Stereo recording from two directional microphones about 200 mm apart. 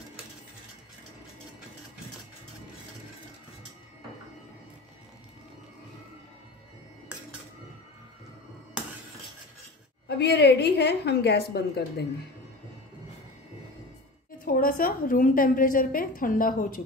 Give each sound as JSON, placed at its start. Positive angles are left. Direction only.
{"t": 10.0, "sound": "a woman's voice", "side_deg": 55}
{"t": 14.4, "sound": "a woman's voice", "side_deg": 45}